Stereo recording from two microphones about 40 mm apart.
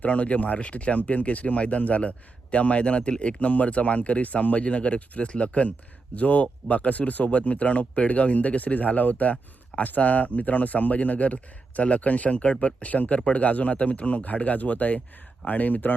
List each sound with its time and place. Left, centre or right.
0.0 s speech: left